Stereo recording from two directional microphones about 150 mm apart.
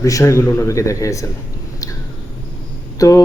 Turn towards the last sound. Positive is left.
turn(degrees=25)  # may be behind; listen again after turning